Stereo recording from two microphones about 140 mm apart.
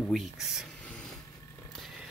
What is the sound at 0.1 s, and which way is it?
Speech, centre (ahead or behind).